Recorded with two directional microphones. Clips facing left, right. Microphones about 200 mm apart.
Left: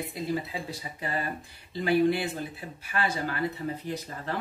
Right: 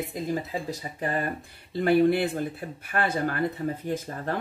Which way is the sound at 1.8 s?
55° right (ahead or behind).